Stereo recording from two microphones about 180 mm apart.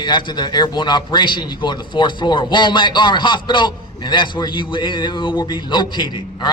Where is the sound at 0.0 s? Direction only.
25° left (ahead or behind).